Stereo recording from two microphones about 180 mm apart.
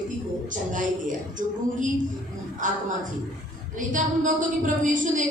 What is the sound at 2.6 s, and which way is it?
Speech, 45° right (ahead or behind).